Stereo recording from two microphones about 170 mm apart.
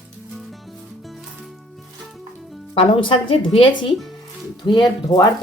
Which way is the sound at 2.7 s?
30° left (ahead or behind).